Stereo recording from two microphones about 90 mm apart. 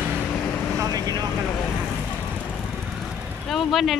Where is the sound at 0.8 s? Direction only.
45° right (ahead or behind).